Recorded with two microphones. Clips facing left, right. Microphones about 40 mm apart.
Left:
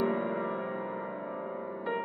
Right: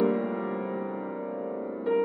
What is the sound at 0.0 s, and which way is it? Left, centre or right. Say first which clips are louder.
Music: right 4 dB; left.